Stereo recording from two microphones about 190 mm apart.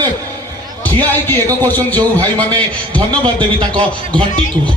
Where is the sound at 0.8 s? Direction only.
10° left (ahead or behind).